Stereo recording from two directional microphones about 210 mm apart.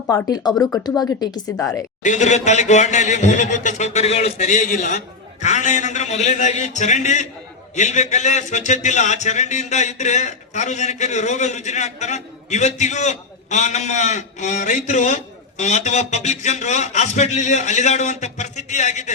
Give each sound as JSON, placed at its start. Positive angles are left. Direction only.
{"t": 0.1, "sound": "speech", "side_deg": 20}
{"t": 2.0, "sound": "a man's voice", "side_deg": 35}